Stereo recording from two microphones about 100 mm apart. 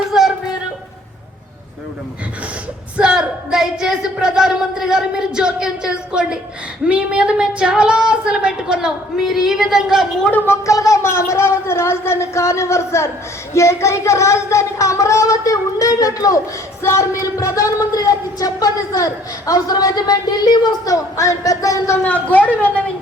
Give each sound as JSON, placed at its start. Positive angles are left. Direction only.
{"t": 0.1, "sound": "a sound", "side_deg": -5}
{"t": 3.0, "sound": "speech", "side_deg": -10}
{"t": 10.2, "sound": "speech", "side_deg": 20}
{"t": 10.7, "sound": "speech", "side_deg": 35}
{"t": 22.0, "sound": "speech", "side_deg": 15}